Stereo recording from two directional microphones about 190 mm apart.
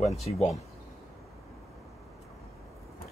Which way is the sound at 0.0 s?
Centre (ahead or behind).